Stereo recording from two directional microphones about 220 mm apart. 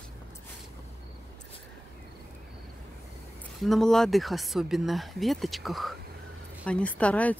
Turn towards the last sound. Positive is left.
turn(degrees=5)  # may be behind; listen again after turning